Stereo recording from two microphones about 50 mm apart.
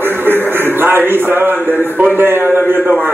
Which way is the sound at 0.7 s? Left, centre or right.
Right.